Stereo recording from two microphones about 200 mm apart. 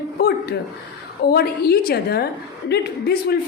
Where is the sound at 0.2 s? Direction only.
50° left (ahead or behind).